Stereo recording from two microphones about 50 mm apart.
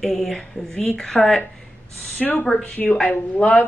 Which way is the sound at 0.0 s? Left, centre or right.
Centre.